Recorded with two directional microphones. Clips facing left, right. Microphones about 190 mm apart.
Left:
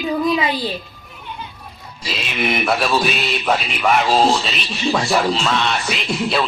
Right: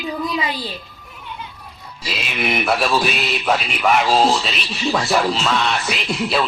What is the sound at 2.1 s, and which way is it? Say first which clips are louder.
Speech: left 1 dB; centre (ahead or behind).